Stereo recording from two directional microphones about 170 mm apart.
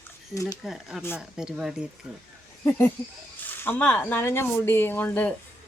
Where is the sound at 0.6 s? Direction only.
5° right (ahead or behind).